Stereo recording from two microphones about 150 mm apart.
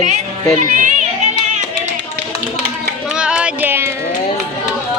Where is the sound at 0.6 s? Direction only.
60° right (ahead or behind).